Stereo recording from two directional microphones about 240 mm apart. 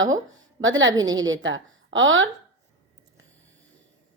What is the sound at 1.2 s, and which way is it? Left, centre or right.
A woman's voice, right.